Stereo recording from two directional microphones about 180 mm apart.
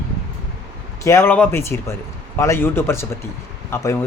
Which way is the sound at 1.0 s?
15° left (ahead or behind).